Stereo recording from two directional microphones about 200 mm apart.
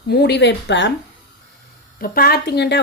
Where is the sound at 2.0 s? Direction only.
50° left (ahead or behind).